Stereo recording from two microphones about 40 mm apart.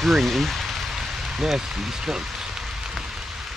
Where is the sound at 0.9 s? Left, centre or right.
Centre.